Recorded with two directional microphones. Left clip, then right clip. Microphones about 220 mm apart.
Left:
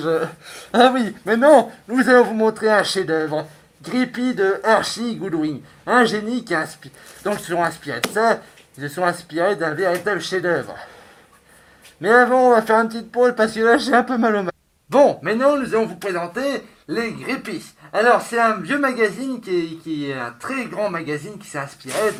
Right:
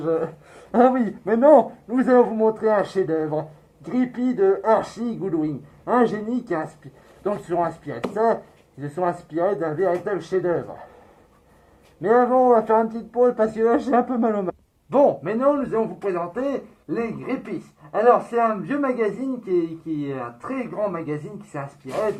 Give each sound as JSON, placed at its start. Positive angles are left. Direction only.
{"t": 0.0, "sound": "speech", "side_deg": 30}
{"t": 0.4, "sound": "speech", "side_deg": 15}
{"t": 12.0, "sound": "speech", "side_deg": 20}